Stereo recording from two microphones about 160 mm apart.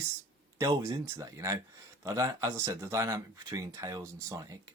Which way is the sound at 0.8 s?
15° right (ahead or behind).